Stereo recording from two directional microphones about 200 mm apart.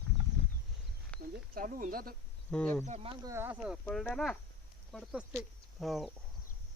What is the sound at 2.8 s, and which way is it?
Speech, 30° right (ahead or behind).